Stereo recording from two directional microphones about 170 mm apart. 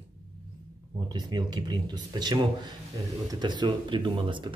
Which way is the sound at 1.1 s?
25° right (ahead or behind).